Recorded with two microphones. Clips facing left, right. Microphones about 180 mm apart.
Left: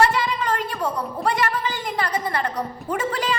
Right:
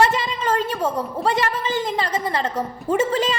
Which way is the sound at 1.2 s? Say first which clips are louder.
Right 1 dB; 25° right (ahead or behind).